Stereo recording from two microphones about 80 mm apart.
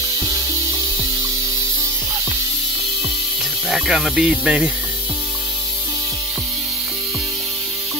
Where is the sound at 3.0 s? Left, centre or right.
Centre.